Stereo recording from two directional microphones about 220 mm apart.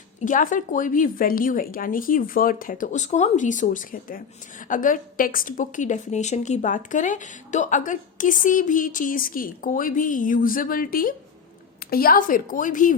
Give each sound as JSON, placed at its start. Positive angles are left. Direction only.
{"t": 0.2, "sound": "a woman's voice", "side_deg": 35}